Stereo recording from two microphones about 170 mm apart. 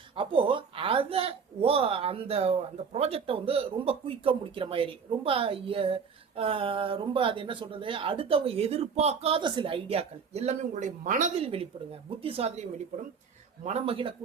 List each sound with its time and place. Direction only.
0.2 s a woman's voice: 30° right (ahead or behind)
13.7 s a woman's voice: 35° right (ahead or behind)